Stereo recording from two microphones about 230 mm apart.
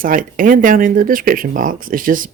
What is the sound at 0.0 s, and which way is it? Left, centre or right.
Speech, right.